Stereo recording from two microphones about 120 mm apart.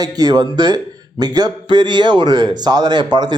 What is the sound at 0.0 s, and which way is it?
A man's voice, 35° right (ahead or behind).